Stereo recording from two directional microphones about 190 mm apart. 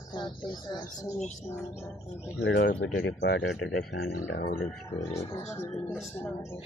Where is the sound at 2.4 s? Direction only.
65° left (ahead or behind); by 4.0 s 80° left.